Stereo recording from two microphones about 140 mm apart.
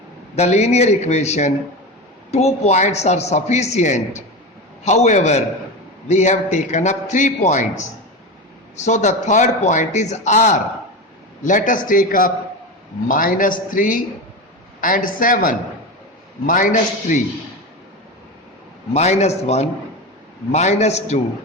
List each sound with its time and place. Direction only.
0.3 s a man's voice: 50° left (ahead or behind)
8.8 s a man's voice: 55° left (ahead or behind)
11.4 s a man's voice: 70° left (ahead or behind); by 12.3 s 85° left
13.1 s a man's voice: 75° left (ahead or behind)
16.5 s a man's voice: 70° left (ahead or behind)
18.9 s speech: 50° left (ahead or behind)